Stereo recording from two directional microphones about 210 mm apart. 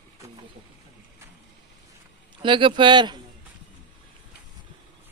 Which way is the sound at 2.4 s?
25° right (ahead or behind).